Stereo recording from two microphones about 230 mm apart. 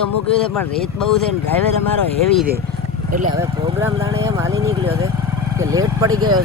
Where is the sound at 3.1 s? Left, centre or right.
Right.